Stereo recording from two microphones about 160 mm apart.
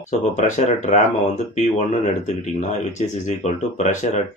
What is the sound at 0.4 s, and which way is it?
Speech, 50° left (ahead or behind).